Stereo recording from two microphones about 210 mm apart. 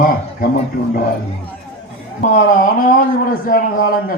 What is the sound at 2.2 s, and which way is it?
Speech, 40° left (ahead or behind).